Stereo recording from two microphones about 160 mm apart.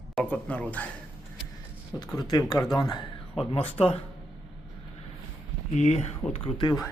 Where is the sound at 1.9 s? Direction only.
25° left (ahead or behind).